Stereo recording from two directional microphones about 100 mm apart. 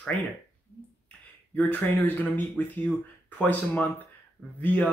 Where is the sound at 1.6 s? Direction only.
20° left (ahead or behind).